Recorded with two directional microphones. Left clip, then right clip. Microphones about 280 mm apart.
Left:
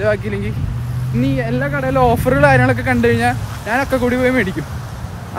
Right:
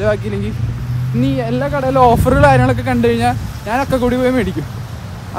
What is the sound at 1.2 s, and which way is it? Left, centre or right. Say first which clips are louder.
Speech: right 2 dB; centre.